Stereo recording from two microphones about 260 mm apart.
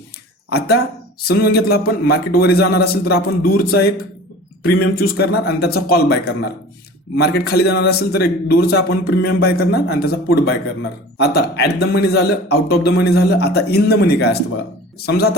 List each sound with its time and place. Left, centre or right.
1.3 s speech: left